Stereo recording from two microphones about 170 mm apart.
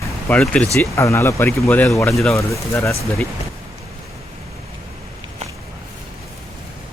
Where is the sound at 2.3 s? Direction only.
15° left (ahead or behind).